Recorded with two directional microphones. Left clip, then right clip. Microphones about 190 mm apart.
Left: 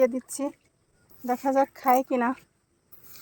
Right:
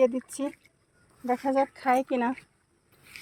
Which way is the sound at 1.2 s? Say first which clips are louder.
Left 2 dB; 10° left (ahead or behind).